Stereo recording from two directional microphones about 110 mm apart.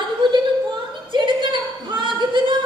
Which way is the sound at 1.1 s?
45° right (ahead or behind).